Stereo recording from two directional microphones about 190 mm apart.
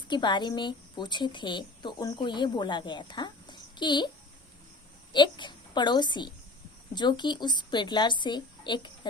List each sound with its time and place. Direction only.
0.1 s a woman's voice: 25° left (ahead or behind)
5.1 s a woman's voice: 25° left (ahead or behind)